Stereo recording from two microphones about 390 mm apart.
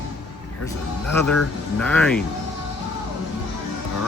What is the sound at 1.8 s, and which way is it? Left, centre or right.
Speech, centre.